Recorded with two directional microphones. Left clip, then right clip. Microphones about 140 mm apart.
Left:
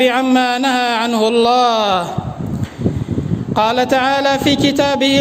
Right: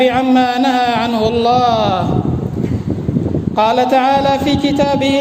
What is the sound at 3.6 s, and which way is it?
A man's voice, 45° left (ahead or behind).